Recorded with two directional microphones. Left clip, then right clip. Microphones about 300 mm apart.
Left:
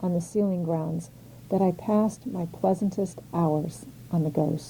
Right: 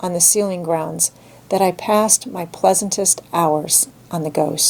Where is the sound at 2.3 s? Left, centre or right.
Centre.